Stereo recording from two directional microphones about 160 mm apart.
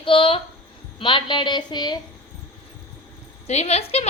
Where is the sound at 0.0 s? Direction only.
35° left (ahead or behind).